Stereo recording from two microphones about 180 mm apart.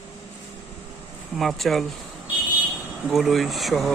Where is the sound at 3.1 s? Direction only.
Centre (ahead or behind).